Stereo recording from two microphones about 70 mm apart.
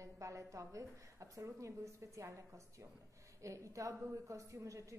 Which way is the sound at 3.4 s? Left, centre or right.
Right.